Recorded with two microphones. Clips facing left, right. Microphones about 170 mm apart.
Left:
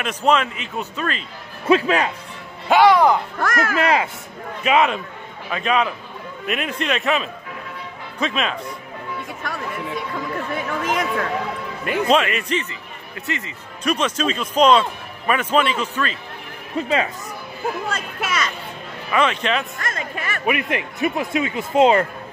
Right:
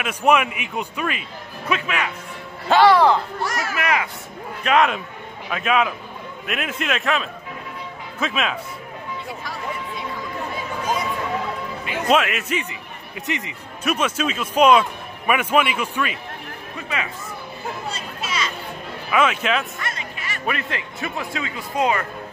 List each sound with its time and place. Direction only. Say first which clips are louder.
0.0 s a man's voice: even; 10° right (ahead or behind)
1.7 s speech: left 8 dB; 35° left (ahead or behind)
2.7 s speech: left 1 dB; 10° left (ahead or behind)
3.3 s speech: left 4 dB; 50° left (ahead or behind)
3.8 s a man's voice: left 3 dB; 30° left (ahead or behind)
4.6 s a man's voice: left 1 dB; centre (ahead or behind)
9.4 s speech: left 4 dB; 60° left (ahead or behind)
10.5 s chatter: left 2 dB; 90° left
12.1 s a man's voice: even; centre (ahead or behind)
16.7 s speech: left 8 dB; 30° left (ahead or behind)
18.2 s music: left 3 dB; 55° left (ahead or behind)
19.0 s a man's voice: even; 5° right (ahead or behind)
19.8 s speech: left 4 dB; 50° left (ahead or behind)
20.4 s a man's voice: left 4 dB; 15° left (ahead or behind)